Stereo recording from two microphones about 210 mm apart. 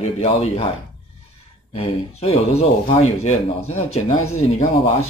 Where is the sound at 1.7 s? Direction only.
25° left (ahead or behind).